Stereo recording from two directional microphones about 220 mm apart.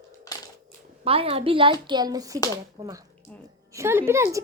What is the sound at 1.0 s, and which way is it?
A woman's voice, 25° right (ahead or behind).